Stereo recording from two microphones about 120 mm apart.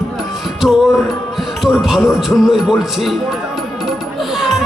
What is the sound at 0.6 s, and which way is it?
Music, 25° left (ahead or behind).